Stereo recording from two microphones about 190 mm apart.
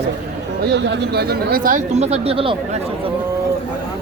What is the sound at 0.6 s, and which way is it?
Speech, 65° right (ahead or behind).